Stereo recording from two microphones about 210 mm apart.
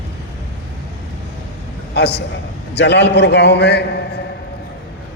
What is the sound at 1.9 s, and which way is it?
A man's voice, 55° left (ahead or behind).